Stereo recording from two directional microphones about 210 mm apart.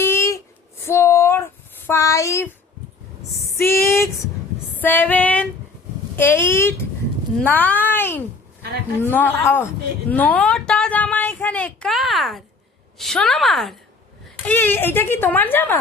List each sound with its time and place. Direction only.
0.0 s a sound: 10° left (ahead or behind)
1.9 s a child's voice: 15° left (ahead or behind)
3.6 s a child's voice: 10° left (ahead or behind)